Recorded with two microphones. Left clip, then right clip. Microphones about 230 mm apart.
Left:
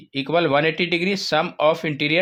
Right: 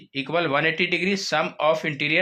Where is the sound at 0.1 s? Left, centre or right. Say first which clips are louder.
Left 4 dB; left.